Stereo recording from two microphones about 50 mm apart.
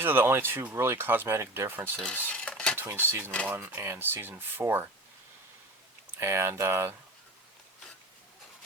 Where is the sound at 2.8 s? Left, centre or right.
Right.